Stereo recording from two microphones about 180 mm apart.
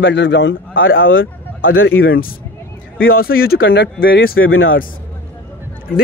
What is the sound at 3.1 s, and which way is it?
Speech, 55° left (ahead or behind).